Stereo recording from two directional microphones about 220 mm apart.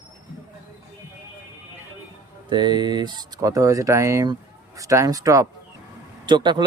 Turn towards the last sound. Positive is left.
turn(degrees=-20)  # may be behind; listen again after turning